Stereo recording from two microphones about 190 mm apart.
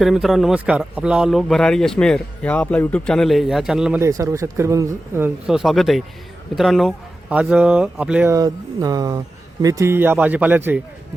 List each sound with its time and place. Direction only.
0.0 s a man's voice: centre (ahead or behind)
4.0 s speech: 15° right (ahead or behind)
5.5 s a man's voice: centre (ahead or behind)
8.4 s speech: 20° right (ahead or behind)